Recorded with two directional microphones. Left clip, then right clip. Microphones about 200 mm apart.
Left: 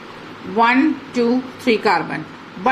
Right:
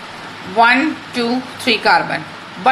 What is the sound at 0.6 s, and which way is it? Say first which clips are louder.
Speech: right 3 dB; 15° left (ahead or behind).